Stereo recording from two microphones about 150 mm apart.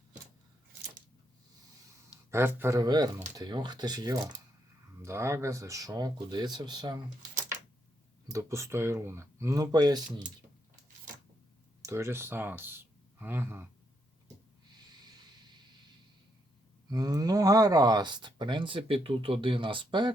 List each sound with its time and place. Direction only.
2.0 s speech: 15° right (ahead or behind)
8.3 s speech: 20° right (ahead or behind)
11.8 s speech: 20° right (ahead or behind)
16.9 s speech: 25° right (ahead or behind)